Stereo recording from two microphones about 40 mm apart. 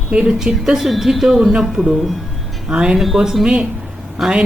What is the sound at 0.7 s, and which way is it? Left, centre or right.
Speech, centre.